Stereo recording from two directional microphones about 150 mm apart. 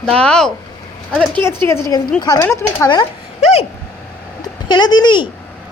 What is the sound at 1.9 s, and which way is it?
Speech, 25° left (ahead or behind).